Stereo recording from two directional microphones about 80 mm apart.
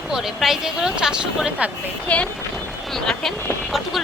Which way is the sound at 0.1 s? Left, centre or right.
Centre.